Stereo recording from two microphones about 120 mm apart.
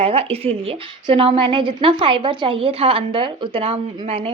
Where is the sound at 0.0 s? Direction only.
55° right (ahead or behind).